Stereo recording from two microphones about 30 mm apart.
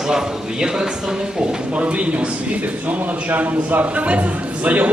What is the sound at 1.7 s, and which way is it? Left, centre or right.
Speech, right.